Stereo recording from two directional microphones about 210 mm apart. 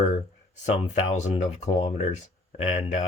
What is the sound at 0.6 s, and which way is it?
Speech, 30° left (ahead or behind).